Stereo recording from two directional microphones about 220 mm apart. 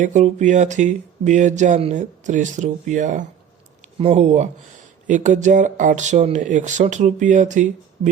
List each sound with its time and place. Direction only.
0.0 s speech: 35° right (ahead or behind)